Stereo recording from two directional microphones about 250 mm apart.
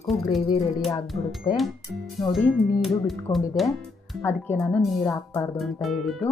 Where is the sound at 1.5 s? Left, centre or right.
Centre.